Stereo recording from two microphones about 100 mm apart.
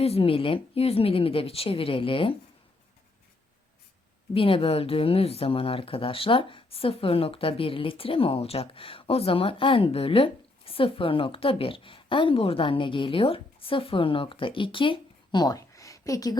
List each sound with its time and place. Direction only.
0.0 s speech: 75° left (ahead or behind)
4.4 s speech: 65° left (ahead or behind); by 16.4 s 35° left (ahead or behind)